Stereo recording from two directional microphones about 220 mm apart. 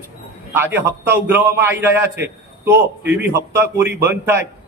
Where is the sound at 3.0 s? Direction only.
50° right (ahead or behind).